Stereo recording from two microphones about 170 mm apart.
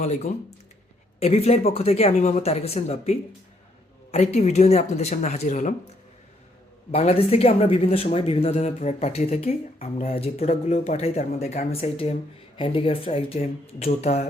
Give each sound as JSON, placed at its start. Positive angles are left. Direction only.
{"t": 0.0, "sound": "speech", "side_deg": 45}
{"t": 6.9, "sound": "speech", "side_deg": 35}